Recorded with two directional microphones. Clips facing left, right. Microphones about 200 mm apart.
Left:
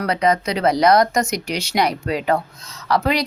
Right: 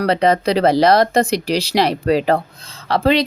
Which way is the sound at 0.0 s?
30° right (ahead or behind).